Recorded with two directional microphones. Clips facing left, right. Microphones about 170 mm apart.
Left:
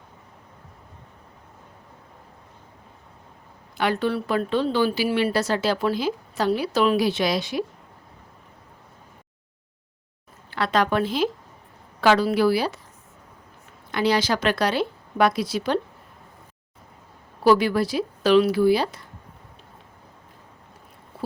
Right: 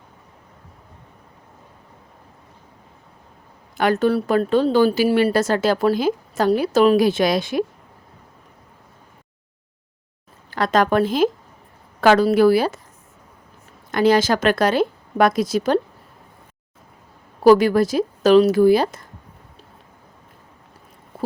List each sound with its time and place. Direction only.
3.8 s speech: 45° right (ahead or behind)
10.5 s speech: 45° right (ahead or behind)
13.9 s speech: 45° right (ahead or behind)
17.4 s speech: 45° right (ahead or behind)